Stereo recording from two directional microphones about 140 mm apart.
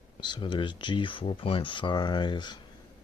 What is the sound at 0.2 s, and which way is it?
Speech, 35° left (ahead or behind).